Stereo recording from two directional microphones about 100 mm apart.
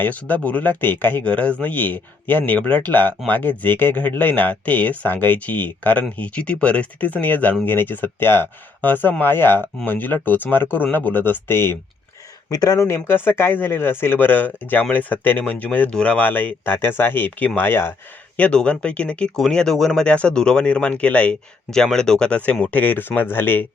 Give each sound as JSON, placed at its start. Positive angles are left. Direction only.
{"t": 0.0, "sound": "speech", "side_deg": 15}
{"t": 12.5, "sound": "speech", "side_deg": 40}
{"t": 12.8, "sound": "speech", "side_deg": 25}